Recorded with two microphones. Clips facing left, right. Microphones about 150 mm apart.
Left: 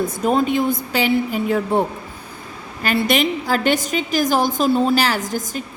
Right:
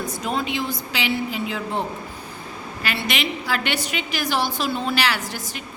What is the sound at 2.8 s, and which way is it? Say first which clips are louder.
A woman's voice: left 8 dB; 45° left (ahead or behind).